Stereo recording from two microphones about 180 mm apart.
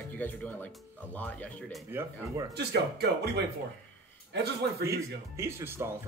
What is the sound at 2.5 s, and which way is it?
Speech, 65° right (ahead or behind).